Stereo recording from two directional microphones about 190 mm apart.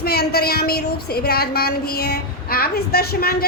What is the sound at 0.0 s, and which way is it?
A woman's voice, 55° left (ahead or behind).